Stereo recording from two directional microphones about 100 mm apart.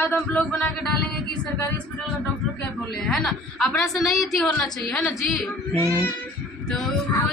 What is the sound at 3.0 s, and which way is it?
Speech, 5° left (ahead or behind).